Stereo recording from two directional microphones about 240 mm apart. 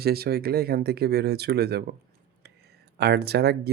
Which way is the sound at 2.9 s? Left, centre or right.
Right.